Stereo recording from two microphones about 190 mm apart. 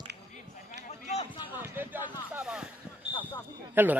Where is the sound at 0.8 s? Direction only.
35° left (ahead or behind).